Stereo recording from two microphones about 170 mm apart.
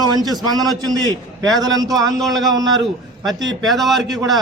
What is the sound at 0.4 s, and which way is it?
A man's voice, 25° right (ahead or behind).